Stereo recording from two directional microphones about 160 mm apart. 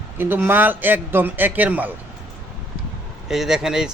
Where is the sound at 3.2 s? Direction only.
5° right (ahead or behind).